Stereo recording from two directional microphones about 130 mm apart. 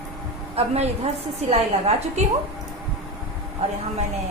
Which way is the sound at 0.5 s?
55° right (ahead or behind).